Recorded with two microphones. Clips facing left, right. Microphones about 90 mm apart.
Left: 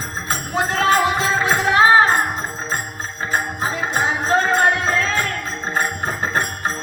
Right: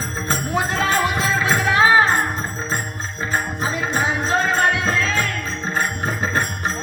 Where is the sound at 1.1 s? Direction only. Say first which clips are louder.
Left 1 dB; 30° left (ahead or behind).